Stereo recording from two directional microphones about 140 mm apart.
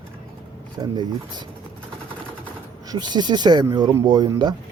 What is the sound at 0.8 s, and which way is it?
Speech, 35° right (ahead or behind).